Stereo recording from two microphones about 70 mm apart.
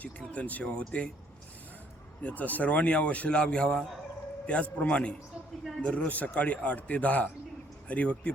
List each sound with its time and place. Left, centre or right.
0.0 s speech: left
2.2 s speech: left